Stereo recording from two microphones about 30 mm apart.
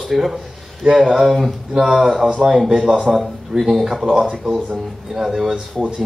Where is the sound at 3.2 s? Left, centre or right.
Centre.